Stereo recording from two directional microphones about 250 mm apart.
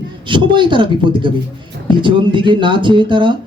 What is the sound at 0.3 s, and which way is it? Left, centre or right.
A woman's voice, centre.